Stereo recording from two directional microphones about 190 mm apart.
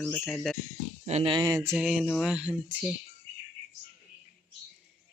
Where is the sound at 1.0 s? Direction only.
30° right (ahead or behind).